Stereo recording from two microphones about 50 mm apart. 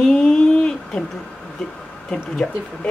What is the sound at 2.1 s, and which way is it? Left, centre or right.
Speech, left.